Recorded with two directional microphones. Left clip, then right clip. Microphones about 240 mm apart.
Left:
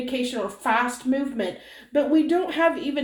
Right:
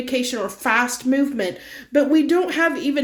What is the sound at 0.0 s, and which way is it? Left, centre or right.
Speech, right.